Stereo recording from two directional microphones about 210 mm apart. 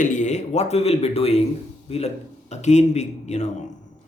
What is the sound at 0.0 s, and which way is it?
A man's voice, 35° left (ahead or behind).